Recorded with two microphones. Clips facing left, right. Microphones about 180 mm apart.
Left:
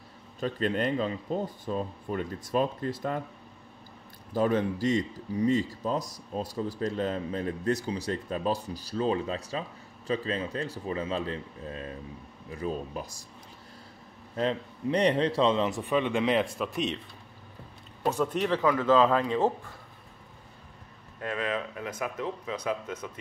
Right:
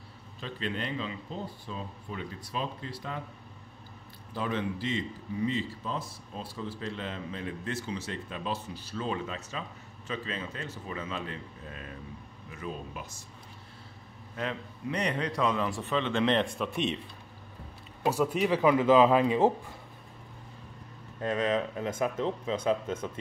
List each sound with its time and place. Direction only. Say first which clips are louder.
0.4 s speech: left 7 dB; 45° left (ahead or behind)
4.3 s a man's voice: left 6 dB; 45° left (ahead or behind)
14.3 s a man's voice: left 6 dB; 30° left (ahead or behind)
15.8 s speech: left 2 dB; 15° left (ahead or behind)
18.0 s speech: even; 10° right (ahead or behind)
21.2 s speech: right 3 dB; 25° right (ahead or behind)